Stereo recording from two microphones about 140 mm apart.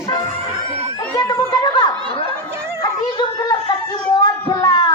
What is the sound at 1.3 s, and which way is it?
Speech, 30° left (ahead or behind).